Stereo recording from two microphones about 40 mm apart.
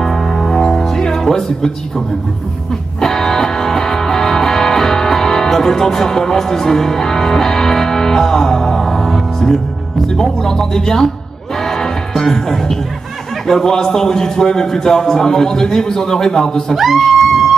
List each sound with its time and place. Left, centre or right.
0.0 s music: centre
3.0 s music: centre
10.0 s a man's voice: centre
11.6 s music: centre
13.5 s a man's voice: centre
16.7 s speech: centre